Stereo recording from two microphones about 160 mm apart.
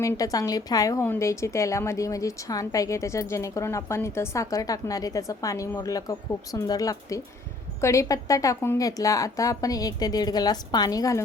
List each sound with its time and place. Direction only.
0.0 s a woman's voice: 20° left (ahead or behind)